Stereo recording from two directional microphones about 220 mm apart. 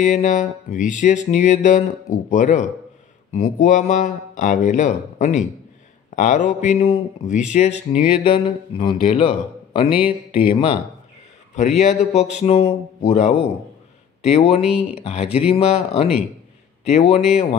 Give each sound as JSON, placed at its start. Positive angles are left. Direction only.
{"t": 0.0, "sound": "a sound", "side_deg": 35}
{"t": 7.5, "sound": "a man's voice", "side_deg": 30}
{"t": 11.5, "sound": "a sound", "side_deg": 30}
{"t": 14.2, "sound": "speech", "side_deg": 30}
{"t": 14.6, "sound": "speech", "side_deg": -5}
{"t": 15.0, "sound": "speech", "side_deg": 30}